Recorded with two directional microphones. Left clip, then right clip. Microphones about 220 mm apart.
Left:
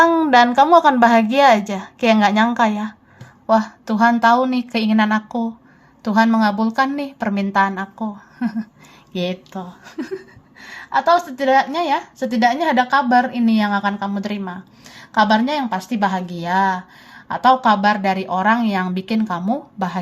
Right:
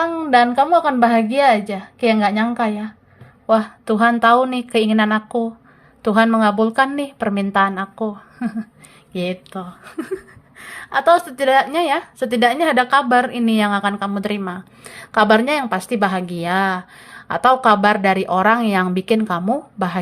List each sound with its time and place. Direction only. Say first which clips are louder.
0.2 s a woman's voice: left 2 dB; 5° right (ahead or behind); by 20.0 s 25° right (ahead or behind)